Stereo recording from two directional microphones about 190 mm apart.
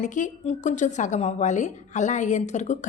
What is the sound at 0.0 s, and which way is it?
A woman's voice, 40° left (ahead or behind).